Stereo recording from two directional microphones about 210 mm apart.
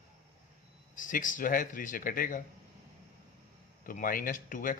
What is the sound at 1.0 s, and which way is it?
Speech, 40° left (ahead or behind).